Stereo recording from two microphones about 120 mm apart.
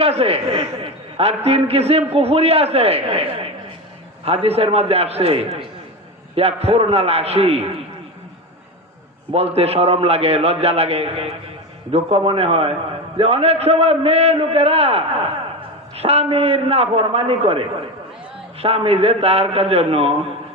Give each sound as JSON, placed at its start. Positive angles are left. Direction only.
{"t": 0.0, "sound": "a man's voice", "side_deg": -55}
{"t": 9.3, "sound": "a man's voice", "side_deg": -55}
{"t": 18.6, "sound": "a man's voice", "side_deg": -55}